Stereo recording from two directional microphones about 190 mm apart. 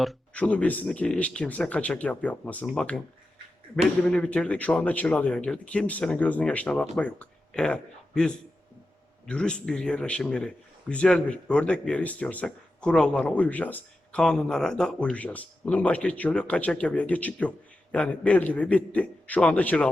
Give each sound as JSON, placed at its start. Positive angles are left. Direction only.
{"t": 0.0, "sound": "a man's voice", "side_deg": 5}